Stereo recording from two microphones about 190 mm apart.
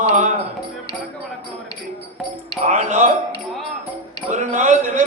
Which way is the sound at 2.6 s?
40° right (ahead or behind).